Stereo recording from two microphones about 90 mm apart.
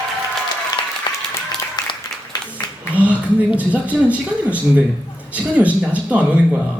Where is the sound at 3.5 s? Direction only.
15° right (ahead or behind).